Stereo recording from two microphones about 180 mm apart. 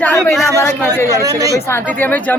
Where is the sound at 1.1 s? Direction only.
20° right (ahead or behind).